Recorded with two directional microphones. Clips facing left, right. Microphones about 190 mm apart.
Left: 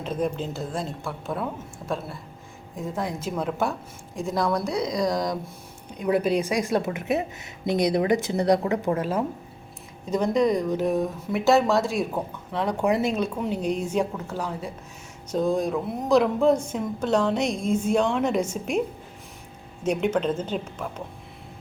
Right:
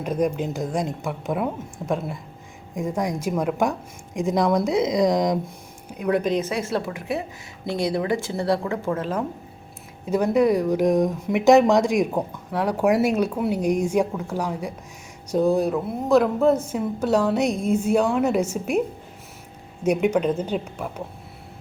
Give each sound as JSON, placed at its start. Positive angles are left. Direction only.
{"t": 0.0, "sound": "speech", "side_deg": -10}
{"t": 2.7, "sound": "speech", "side_deg": -15}
{"t": 6.0, "sound": "a woman's voice", "side_deg": 0}
{"t": 10.1, "sound": "speech", "side_deg": -10}
{"t": 19.8, "sound": "speech", "side_deg": -10}